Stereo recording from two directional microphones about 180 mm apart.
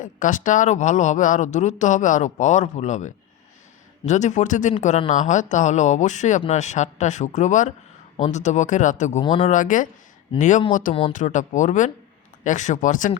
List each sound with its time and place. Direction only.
0.0 s speech: 45° left (ahead or behind)
9.2 s speech: 25° left (ahead or behind)
9.5 s speech: 45° left (ahead or behind)